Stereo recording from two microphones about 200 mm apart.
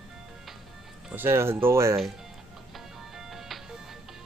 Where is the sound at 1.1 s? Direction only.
10° right (ahead or behind).